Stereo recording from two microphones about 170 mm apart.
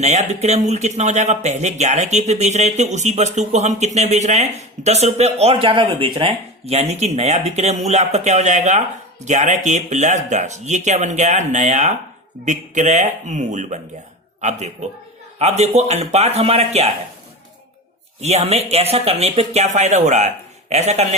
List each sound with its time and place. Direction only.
0.0 s speech: 40° right (ahead or behind)
18.2 s speech: 40° right (ahead or behind)